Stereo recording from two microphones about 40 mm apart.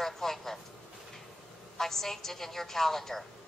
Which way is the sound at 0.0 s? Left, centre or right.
Centre.